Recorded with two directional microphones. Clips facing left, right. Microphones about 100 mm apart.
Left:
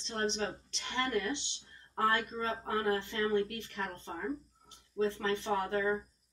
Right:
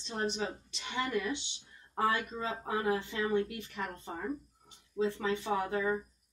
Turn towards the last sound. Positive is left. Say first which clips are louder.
# even
turn(degrees=-10)  # may be behind; listen again after turning